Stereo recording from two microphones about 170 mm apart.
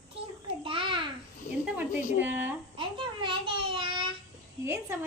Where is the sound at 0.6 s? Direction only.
30° right (ahead or behind).